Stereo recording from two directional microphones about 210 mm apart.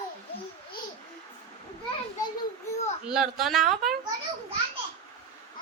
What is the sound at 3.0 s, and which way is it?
Speech, 5° right (ahead or behind).